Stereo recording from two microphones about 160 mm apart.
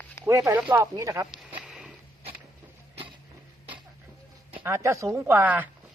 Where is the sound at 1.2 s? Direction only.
5° right (ahead or behind).